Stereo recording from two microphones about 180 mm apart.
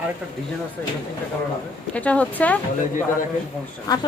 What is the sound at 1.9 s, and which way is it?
Speech, 5° left (ahead or behind).